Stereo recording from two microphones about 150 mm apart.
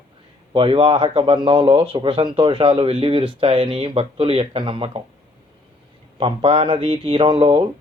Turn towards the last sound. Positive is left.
turn(degrees=-35)  # may be behind; listen again after turning